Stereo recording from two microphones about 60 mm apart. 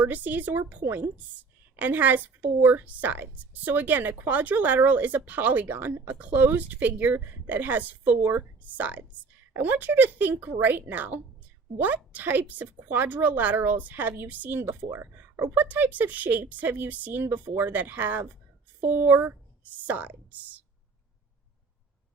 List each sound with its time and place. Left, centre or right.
0.0 s a woman's voice: right